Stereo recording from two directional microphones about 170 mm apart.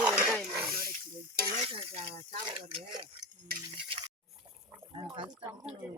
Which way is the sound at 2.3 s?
30° right (ahead or behind).